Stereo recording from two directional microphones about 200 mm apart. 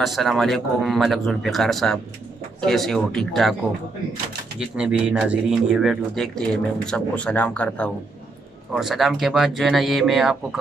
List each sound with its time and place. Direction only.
0.0 s a man's voice: centre (ahead or behind)
4.6 s a man's voice: 5° right (ahead or behind)